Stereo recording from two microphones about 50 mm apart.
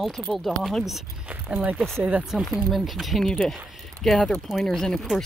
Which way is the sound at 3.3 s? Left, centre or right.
Centre.